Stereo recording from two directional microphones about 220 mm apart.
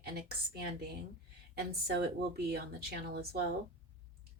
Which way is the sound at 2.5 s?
45° right (ahead or behind).